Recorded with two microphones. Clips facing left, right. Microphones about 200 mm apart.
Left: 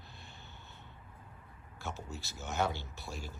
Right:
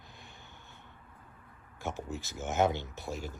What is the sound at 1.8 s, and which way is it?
Speech, 15° right (ahead or behind).